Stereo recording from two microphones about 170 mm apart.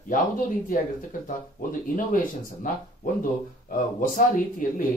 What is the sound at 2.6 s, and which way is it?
Speech, 55° left (ahead or behind).